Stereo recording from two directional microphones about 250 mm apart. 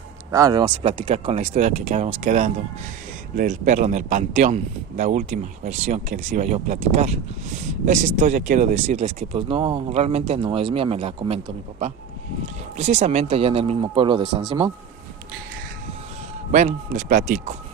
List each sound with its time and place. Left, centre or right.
0.3 s speech: centre
16.5 s speech: right